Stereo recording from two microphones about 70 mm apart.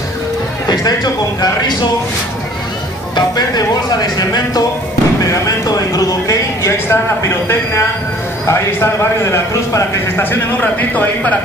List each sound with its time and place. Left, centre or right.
0.7 s speech: left
3.2 s speech: left
5.2 s speech: left
10.6 s speech: left